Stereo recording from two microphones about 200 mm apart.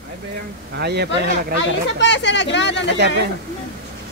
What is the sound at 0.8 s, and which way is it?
Speech, 55° right (ahead or behind).